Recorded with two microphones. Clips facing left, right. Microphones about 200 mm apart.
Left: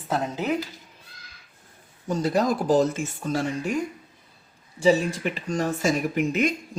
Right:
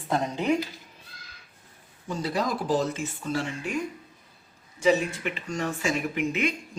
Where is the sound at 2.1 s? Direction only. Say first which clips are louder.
Left 5 dB; 45° left (ahead or behind).